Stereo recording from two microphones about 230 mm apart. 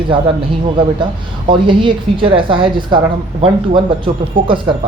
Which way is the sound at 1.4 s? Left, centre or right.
Right.